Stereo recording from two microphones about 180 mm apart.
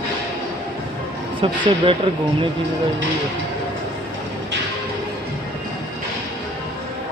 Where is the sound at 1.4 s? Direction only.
30° right (ahead or behind).